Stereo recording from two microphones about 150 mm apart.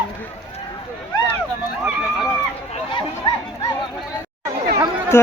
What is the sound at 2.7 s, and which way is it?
Chatter, 35° left (ahead or behind).